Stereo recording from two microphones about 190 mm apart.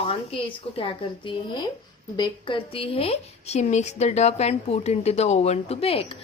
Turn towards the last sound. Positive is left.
turn(degrees=30)  # may be behind; listen again after turning